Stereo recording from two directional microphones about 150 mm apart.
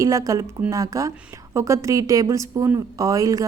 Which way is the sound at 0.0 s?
20° right (ahead or behind).